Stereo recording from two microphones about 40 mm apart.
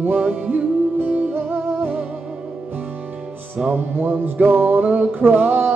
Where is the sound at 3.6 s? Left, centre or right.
Right.